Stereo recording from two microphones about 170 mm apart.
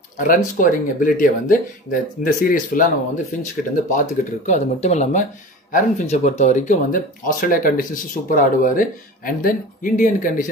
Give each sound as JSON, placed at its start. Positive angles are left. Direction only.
{"t": 0.2, "sound": "speech", "side_deg": 50}